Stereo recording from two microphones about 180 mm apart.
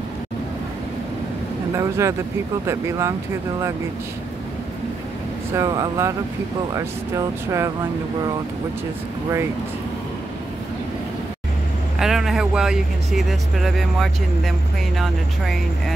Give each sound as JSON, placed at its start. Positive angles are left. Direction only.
{"t": 1.7, "sound": "speech", "side_deg": -15}
{"t": 5.5, "sound": "speech", "side_deg": -20}
{"t": 12.0, "sound": "speech", "side_deg": 0}